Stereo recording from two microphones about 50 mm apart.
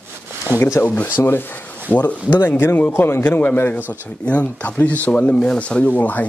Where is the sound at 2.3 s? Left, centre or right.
Left.